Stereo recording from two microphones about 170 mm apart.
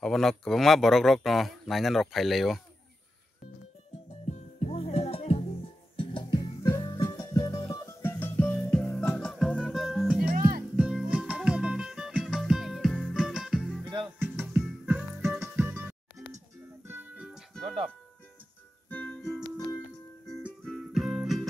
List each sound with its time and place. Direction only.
0.0 s speech: centre (ahead or behind)
4.1 s music: 40° left (ahead or behind); by 13.8 s centre (ahead or behind)
14.2 s music: 10° right (ahead or behind)
17.5 s music: 5° left (ahead or behind)
18.9 s music: 10° left (ahead or behind)
19.4 s music: 30° left (ahead or behind)
20.2 s music: centre (ahead or behind)